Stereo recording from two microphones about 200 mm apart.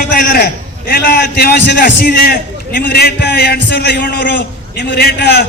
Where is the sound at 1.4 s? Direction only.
50° left (ahead or behind).